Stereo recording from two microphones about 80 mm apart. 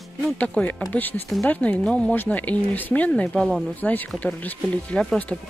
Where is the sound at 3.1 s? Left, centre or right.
Centre.